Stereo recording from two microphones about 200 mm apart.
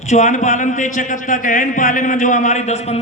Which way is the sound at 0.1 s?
35° left (ahead or behind).